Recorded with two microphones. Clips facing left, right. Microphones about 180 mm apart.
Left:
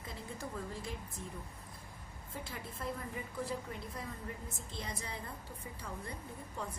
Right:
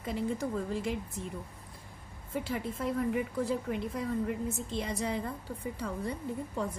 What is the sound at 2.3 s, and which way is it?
A woman's voice, 90° right.